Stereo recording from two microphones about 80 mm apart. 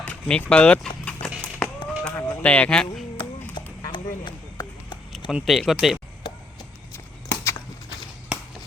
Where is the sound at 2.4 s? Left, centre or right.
Centre.